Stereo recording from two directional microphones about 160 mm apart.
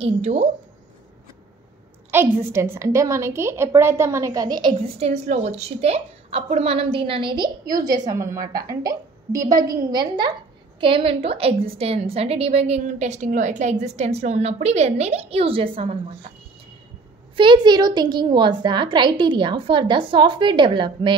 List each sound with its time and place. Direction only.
0.0 s a woman's voice: 45° right (ahead or behind)
2.0 s a woman's voice: 15° right (ahead or behind); by 16.0 s 35° right (ahead or behind)
17.4 s a woman's voice: 30° right (ahead or behind)